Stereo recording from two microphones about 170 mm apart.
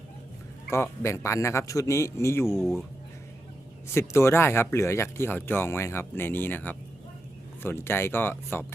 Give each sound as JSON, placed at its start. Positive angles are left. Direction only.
{"t": 0.7, "sound": "speech", "side_deg": 15}
{"t": 4.1, "sound": "speech", "side_deg": 15}